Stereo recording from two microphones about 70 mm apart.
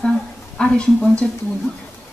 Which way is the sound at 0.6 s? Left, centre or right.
Centre.